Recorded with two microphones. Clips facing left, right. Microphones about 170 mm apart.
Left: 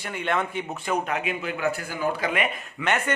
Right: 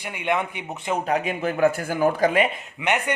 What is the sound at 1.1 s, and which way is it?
A man's voice, 40° right (ahead or behind).